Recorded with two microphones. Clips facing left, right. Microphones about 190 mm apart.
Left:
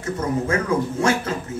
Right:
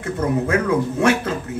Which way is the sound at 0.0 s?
60° right (ahead or behind).